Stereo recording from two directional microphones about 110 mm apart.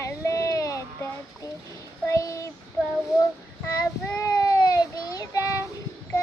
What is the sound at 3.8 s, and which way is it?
Child singing, 30° left (ahead or behind).